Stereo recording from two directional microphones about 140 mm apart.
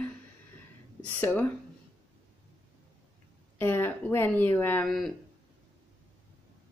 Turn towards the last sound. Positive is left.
turn(degrees=0)  # may be behind; listen again after turning